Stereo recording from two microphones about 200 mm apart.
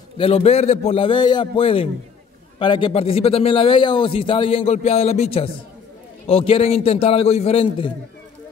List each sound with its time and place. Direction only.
0.2 s a man's voice: 30° left (ahead or behind)